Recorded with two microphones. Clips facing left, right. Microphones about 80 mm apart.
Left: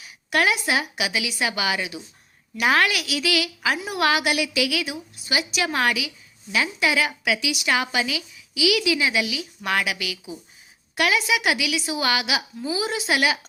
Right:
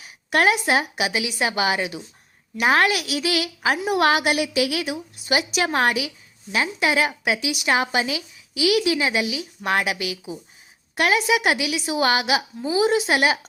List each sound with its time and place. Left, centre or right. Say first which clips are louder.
0.0 s a woman's voice: right 3 dB; right